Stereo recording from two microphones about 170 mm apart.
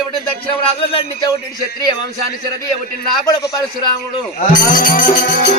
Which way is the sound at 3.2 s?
20° left (ahead or behind).